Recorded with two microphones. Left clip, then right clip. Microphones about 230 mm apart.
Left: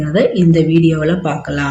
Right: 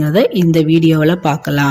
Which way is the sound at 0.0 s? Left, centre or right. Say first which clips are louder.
Right 1 dB; right.